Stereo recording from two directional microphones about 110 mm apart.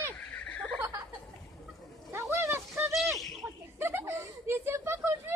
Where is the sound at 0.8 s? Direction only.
30° right (ahead or behind).